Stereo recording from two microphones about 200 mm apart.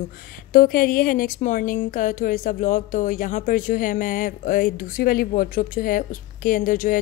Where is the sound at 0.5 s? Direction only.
45° left (ahead or behind).